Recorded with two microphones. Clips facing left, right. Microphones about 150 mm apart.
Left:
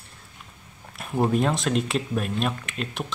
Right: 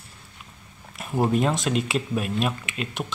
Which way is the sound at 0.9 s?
Centre (ahead or behind).